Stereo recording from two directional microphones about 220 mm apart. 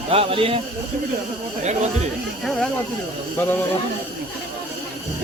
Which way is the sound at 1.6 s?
30° right (ahead or behind).